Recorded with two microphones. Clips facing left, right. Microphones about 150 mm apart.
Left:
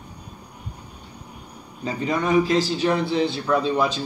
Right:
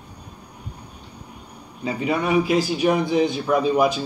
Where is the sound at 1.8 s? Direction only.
10° right (ahead or behind).